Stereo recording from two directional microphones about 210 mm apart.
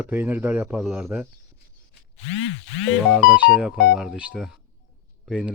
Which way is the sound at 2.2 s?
70° left (ahead or behind).